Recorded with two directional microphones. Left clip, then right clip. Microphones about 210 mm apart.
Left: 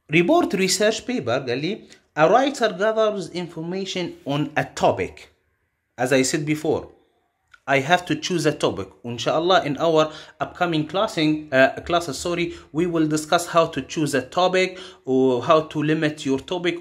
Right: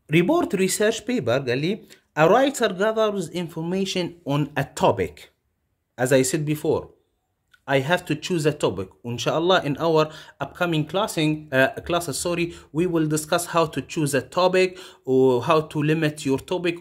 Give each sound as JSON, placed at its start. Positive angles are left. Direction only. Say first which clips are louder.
{"t": 0.1, "sound": "speech", "louder": "left 2 dB", "side_deg": -25}